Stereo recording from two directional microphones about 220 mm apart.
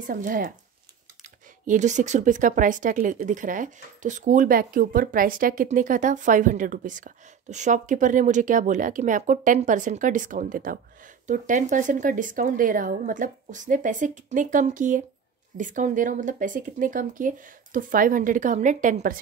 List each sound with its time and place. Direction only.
0.0 s speech: 40° right (ahead or behind)
1.7 s speech: 35° right (ahead or behind)